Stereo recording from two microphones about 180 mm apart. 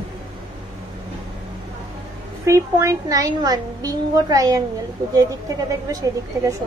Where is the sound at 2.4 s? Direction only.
15° right (ahead or behind).